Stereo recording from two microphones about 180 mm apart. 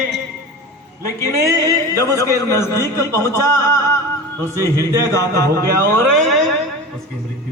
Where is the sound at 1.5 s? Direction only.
20° right (ahead or behind).